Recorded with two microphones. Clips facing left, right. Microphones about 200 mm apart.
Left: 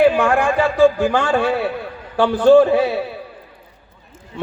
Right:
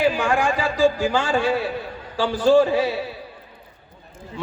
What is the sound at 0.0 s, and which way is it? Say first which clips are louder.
A man's voice: left 6 dB; 60° left (ahead or behind).